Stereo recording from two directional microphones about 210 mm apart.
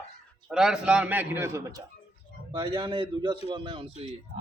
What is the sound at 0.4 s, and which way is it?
A man's voice, 5° right (ahead or behind).